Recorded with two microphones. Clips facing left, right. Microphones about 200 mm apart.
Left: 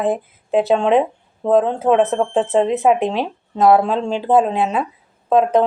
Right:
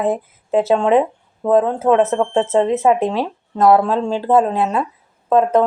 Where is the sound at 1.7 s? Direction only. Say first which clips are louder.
Right 1 dB; 15° left (ahead or behind).